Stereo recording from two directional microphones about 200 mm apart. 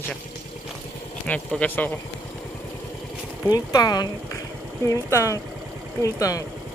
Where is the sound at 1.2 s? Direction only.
5° left (ahead or behind).